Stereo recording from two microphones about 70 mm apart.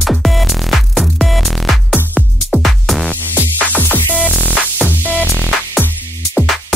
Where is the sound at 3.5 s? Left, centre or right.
Left.